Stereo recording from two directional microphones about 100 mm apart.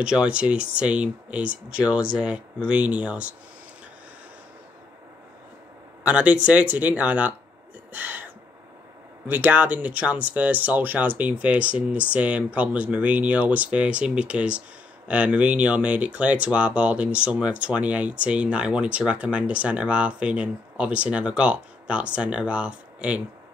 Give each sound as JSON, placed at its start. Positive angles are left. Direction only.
{"t": 0.0, "sound": "speech", "side_deg": -10}
{"t": 6.0, "sound": "speech", "side_deg": -15}
{"t": 7.9, "sound": "gasp", "side_deg": -15}
{"t": 9.3, "sound": "speech", "side_deg": -15}